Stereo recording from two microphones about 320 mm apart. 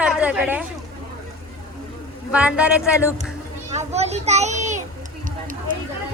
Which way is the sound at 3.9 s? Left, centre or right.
Centre.